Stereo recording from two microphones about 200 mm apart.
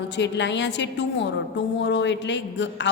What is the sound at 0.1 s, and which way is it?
A woman's voice, 60° left (ahead or behind).